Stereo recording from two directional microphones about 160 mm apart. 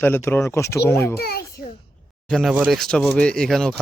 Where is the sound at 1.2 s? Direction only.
75° left (ahead or behind).